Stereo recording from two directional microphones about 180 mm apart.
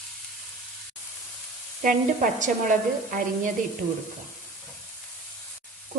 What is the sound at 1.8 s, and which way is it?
Speech, 45° right (ahead or behind).